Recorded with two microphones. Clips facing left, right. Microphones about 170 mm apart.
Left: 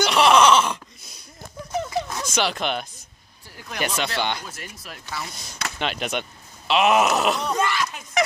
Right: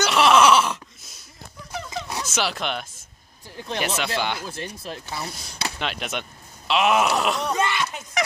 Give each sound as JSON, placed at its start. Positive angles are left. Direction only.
{"t": 0.0, "sound": "a sound", "side_deg": 0}
{"t": 1.9, "sound": "zipper", "side_deg": -10}
{"t": 3.5, "sound": "speech", "side_deg": -30}
{"t": 3.8, "sound": "groan", "side_deg": -5}
{"t": 4.5, "sound": "speech", "side_deg": -30}
{"t": 5.8, "sound": "groan", "side_deg": 0}